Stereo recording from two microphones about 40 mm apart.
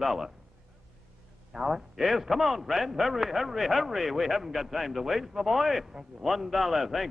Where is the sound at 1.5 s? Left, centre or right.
Centre.